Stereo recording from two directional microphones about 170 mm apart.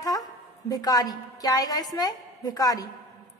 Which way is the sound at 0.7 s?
20° left (ahead or behind).